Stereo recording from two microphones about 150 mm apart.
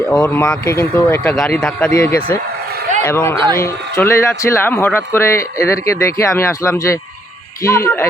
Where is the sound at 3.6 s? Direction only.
20° left (ahead or behind).